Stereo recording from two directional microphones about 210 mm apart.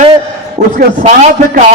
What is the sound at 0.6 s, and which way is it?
A man's voice, 35° right (ahead or behind).